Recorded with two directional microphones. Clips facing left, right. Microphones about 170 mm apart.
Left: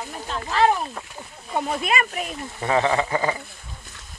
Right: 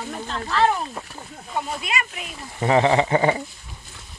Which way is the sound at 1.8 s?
50° left (ahead or behind).